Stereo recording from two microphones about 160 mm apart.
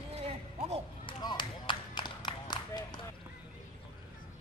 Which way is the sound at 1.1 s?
25° left (ahead or behind).